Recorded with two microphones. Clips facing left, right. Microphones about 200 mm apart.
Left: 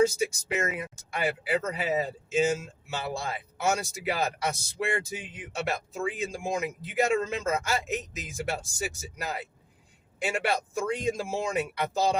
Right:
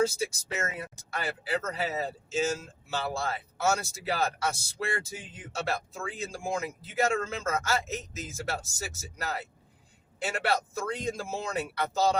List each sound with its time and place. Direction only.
0.2 s speech: 15° left (ahead or behind)